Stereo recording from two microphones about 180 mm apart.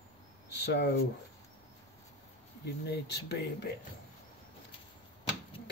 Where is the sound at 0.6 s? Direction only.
65° left (ahead or behind).